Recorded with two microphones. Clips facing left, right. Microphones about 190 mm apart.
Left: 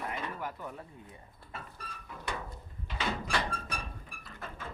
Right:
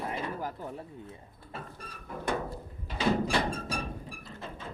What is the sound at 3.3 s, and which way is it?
Music, 25° right (ahead or behind).